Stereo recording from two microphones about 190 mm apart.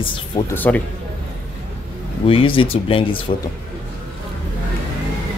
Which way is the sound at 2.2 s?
30° left (ahead or behind).